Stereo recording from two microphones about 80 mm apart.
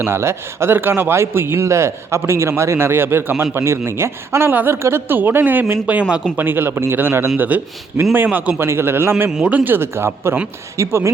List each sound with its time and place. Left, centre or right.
0.0 s speech: right
5.8 s speech: centre
6.3 s speech: right
9.3 s speech: centre; by 11.1 s right